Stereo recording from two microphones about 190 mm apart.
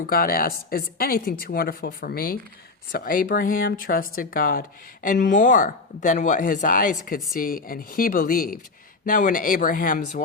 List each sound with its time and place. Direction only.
0.1 s a woman's voice: 50° left (ahead or behind)